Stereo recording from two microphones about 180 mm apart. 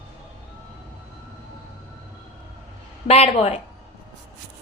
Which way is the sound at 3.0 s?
35° left (ahead or behind).